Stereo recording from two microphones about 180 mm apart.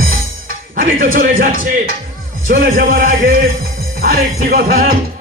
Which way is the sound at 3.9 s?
55° right (ahead or behind).